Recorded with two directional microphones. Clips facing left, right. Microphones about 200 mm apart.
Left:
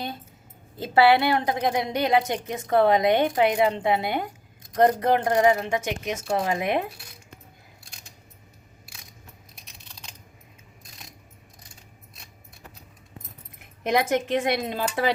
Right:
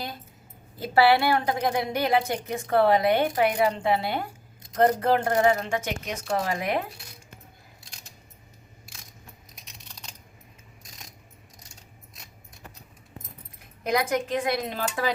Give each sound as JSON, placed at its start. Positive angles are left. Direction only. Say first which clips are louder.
{"t": 0.8, "sound": "a woman's voice", "louder": "left 2 dB", "side_deg": 20}
{"t": 13.8, "sound": "a woman's voice", "louder": "left 2 dB", "side_deg": 25}